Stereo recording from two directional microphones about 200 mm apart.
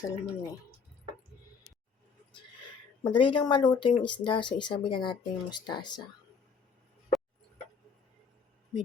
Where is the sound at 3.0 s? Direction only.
25° left (ahead or behind).